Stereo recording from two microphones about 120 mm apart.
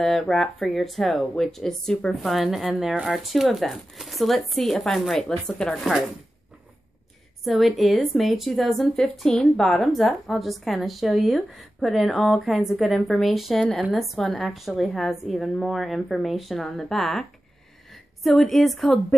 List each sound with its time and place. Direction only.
0.0 s speech: 5° left (ahead or behind)
7.4 s a woman's voice: centre (ahead or behind)